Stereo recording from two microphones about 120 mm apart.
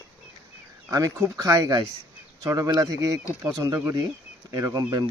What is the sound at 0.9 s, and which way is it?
Speech, 30° right (ahead or behind).